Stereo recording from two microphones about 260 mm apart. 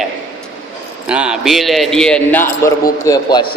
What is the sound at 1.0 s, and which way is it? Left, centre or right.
A man's voice, centre.